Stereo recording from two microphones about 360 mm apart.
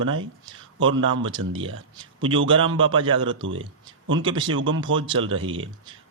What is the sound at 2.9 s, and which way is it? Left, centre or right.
Speech, centre.